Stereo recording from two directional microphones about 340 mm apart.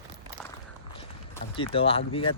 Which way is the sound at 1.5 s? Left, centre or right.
Centre.